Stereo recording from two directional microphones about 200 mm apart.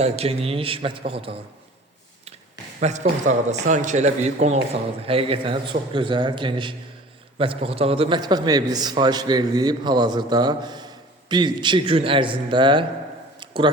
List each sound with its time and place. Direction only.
0.0 s a man's voice: 30° right (ahead or behind)
2.8 s a man's voice: 35° right (ahead or behind)
13.4 s a sound: 25° right (ahead or behind)